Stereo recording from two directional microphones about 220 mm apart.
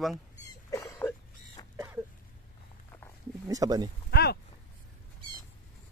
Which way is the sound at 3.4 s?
15° right (ahead or behind).